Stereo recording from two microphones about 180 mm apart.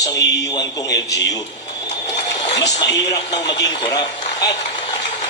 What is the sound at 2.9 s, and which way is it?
A man's voice, 20° left (ahead or behind).